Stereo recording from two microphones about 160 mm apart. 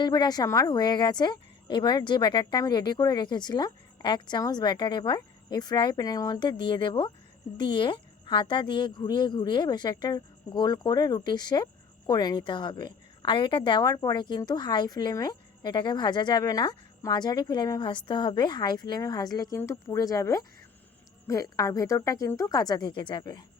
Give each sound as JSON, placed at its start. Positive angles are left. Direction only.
{"t": 0.0, "sound": "speech", "side_deg": 25}